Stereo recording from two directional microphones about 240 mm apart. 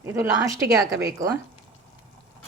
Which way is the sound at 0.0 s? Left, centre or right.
Centre.